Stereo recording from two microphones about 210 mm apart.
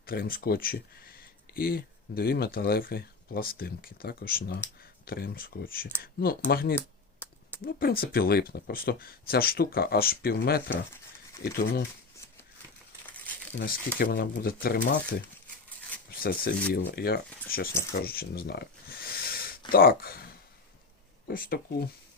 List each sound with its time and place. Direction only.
0.0 s speech: 45° left (ahead or behind)
6.7 s typing: 10° left (ahead or behind)
7.6 s speech: 45° left (ahead or behind)
10.7 s speech: 10° left (ahead or behind)
11.5 s speech: 50° left (ahead or behind)
13.5 s speech: 50° left (ahead or behind)
16.1 s speech: 45° left (ahead or behind)